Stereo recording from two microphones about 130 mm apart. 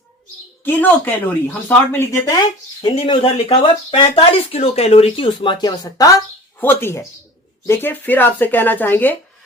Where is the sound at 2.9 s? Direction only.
45° left (ahead or behind).